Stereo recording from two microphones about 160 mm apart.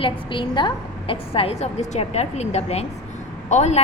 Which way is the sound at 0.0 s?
30° left (ahead or behind).